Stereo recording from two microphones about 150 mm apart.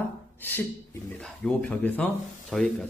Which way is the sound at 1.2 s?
5° left (ahead or behind).